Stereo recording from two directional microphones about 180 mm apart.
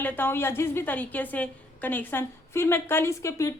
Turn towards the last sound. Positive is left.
turn(degrees=15)  # may be behind; listen again after turning